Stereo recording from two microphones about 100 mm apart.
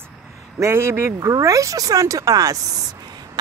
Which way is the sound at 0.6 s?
25° right (ahead or behind).